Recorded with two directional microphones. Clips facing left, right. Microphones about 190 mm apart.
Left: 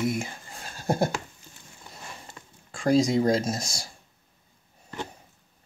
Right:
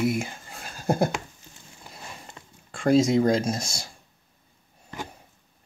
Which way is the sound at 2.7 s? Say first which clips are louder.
Right 2 dB; centre (ahead or behind).